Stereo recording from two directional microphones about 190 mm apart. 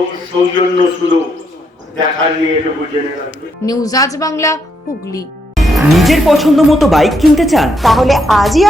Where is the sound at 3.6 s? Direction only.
20° left (ahead or behind).